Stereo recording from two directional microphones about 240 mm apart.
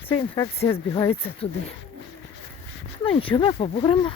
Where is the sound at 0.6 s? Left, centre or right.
Left.